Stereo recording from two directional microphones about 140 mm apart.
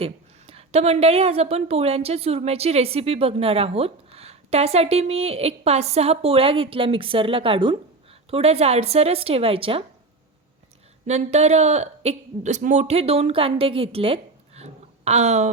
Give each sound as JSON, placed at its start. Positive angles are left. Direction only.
{"t": 0.0, "sound": "a woman's voice", "side_deg": -45}
{"t": 11.0, "sound": "speech", "side_deg": -50}